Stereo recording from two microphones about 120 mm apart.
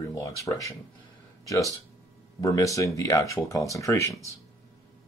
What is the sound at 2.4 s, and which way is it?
Speech, 25° left (ahead or behind).